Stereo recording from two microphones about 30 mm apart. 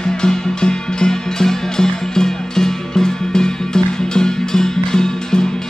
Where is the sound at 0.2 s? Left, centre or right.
Left.